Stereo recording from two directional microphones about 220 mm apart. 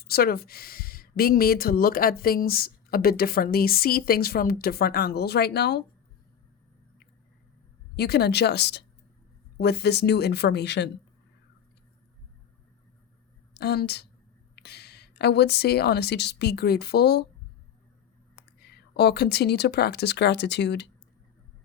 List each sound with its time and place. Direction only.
0.0 s speech: 45° left (ahead or behind)
7.9 s speech: 45° left (ahead or behind)
13.5 s a woman's voice: 45° left (ahead or behind)
18.3 s speech: 50° left (ahead or behind)